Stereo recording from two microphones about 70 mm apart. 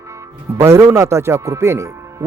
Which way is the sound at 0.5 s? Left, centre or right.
Right.